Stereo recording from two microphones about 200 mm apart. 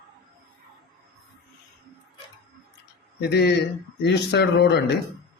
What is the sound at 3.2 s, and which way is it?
Speech, 55° left (ahead or behind).